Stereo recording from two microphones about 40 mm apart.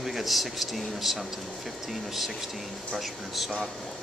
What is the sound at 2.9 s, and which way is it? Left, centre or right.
Speech, centre.